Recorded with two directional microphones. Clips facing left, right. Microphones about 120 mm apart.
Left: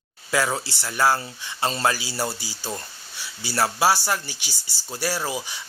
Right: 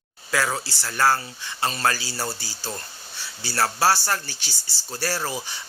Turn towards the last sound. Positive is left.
turn(degrees=10)  # may be behind; listen again after turning